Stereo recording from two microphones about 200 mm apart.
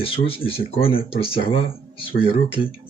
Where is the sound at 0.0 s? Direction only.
30° left (ahead or behind).